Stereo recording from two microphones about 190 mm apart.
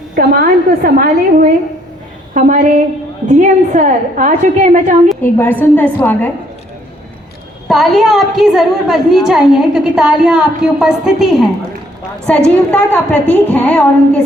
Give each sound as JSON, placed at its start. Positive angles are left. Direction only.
{"t": 0.2, "sound": "a woman's voice", "side_deg": -50}
{"t": 5.2, "sound": "a woman's voice", "side_deg": 10}
{"t": 7.7, "sound": "a woman's voice", "side_deg": 0}